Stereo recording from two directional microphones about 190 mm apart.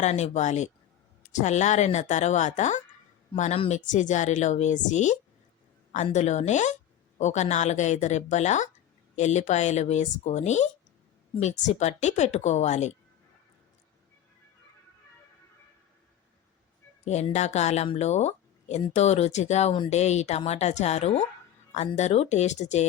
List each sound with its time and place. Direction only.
0.0 s speech: 35° left (ahead or behind)
17.1 s speech: 35° left (ahead or behind)